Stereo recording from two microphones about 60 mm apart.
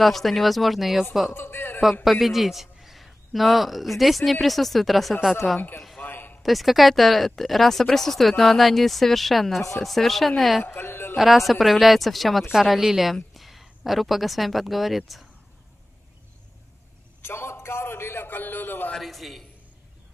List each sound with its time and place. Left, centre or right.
0.0 s speech: centre
1.3 s a man's voice: left
2.0 s a man's voice: centre
5.4 s a man's voice: centre
6.0 s a sound: left
6.4 s speech: centre
10.6 s speech: left
11.1 s a woman's voice: centre
17.2 s a sound: left
18.9 s a man's voice: centre